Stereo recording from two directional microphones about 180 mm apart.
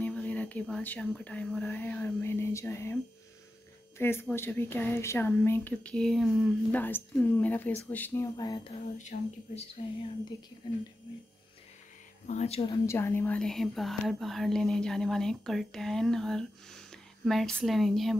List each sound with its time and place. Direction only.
0.0 s speech: 10° left (ahead or behind)
4.0 s speech: 15° left (ahead or behind)
9.1 s speech: 45° left (ahead or behind)
9.8 s speech: 30° left (ahead or behind)
12.3 s speech: 35° left (ahead or behind)
12.7 s speech: 15° left (ahead or behind)